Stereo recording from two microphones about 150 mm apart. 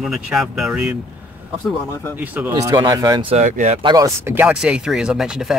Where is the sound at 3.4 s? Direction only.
55° right (ahead or behind).